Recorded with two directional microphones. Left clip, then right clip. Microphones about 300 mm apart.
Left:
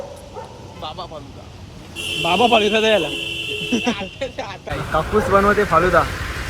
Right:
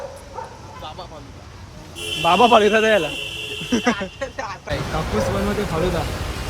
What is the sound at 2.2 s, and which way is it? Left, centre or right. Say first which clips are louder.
Speech: right 2 dB; centre.